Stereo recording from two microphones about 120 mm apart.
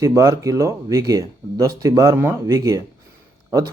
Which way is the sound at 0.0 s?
25° right (ahead or behind).